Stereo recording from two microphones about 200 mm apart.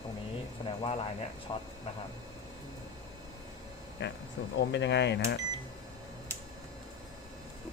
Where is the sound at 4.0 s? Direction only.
60° left (ahead or behind).